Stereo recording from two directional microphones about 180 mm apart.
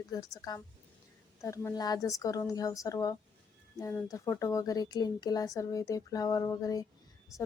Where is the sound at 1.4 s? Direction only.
15° left (ahead or behind).